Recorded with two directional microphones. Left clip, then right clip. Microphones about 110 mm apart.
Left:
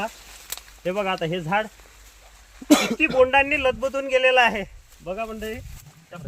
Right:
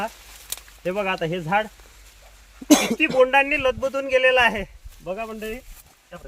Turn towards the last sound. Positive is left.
turn(degrees=-5)  # may be behind; listen again after turning